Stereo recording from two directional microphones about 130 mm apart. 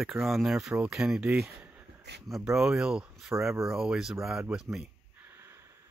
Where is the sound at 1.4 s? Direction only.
15° right (ahead or behind).